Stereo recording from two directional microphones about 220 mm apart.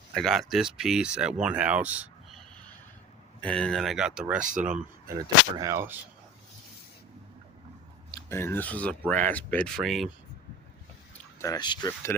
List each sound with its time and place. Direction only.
0.1 s speech: centre (ahead or behind)
3.4 s speech: 5° left (ahead or behind)
4.4 s speech: 35° right (ahead or behind)
4.6 s speech: 5° right (ahead or behind)
8.1 s speech: 10° left (ahead or behind)
11.3 s speech: 15° left (ahead or behind)